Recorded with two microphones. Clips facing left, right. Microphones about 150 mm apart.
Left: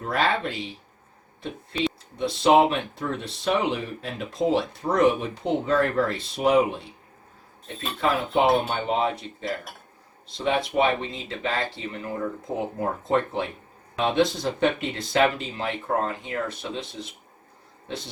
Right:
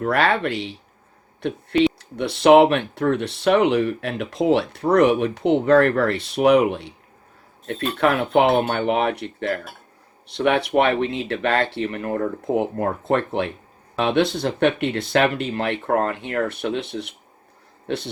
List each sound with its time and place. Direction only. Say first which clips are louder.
0.0 s a man's voice: right 5 dB; 70° right (ahead or behind)